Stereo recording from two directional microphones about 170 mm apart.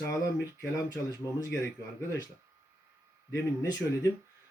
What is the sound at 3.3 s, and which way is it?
Speech, 15° left (ahead or behind).